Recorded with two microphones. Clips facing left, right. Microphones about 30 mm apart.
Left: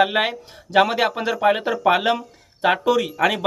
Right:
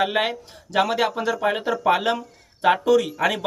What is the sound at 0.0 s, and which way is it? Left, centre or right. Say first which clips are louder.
Speech: left 3 dB; centre.